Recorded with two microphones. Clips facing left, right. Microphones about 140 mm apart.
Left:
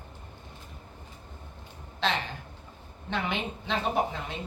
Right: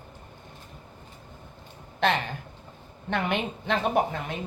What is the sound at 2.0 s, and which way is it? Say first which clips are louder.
Speech: right 5 dB; 55° right (ahead or behind).